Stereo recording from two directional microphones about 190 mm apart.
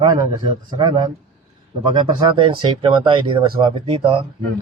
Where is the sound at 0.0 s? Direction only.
20° right (ahead or behind).